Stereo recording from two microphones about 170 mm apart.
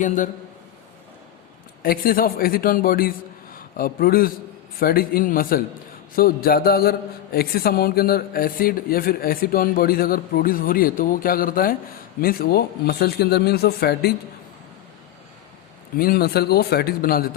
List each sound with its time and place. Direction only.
1.8 s a man's voice: 60° left (ahead or behind)
16.0 s speech: 65° left (ahead or behind)